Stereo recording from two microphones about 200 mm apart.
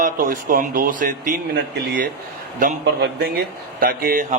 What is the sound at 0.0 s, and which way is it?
Speech, 45° right (ahead or behind).